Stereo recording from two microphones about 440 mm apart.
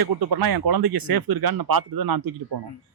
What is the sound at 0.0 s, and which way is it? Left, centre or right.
A man's voice, right.